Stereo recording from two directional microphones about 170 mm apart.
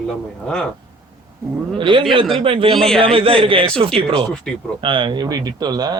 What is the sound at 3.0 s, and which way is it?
Speech, 30° right (ahead or behind).